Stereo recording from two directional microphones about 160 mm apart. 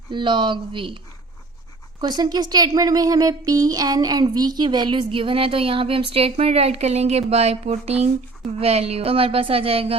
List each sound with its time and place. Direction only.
0.1 s speech: 30° right (ahead or behind)
2.0 s speech: 25° right (ahead or behind)